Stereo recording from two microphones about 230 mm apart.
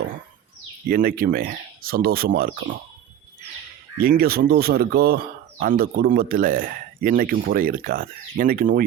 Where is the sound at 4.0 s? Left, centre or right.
Right.